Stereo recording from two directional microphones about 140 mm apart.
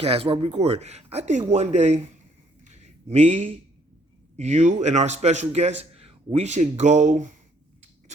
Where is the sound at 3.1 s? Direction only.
50° right (ahead or behind).